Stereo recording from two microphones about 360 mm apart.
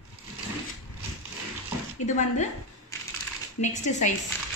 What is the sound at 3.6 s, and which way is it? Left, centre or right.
Speech, centre.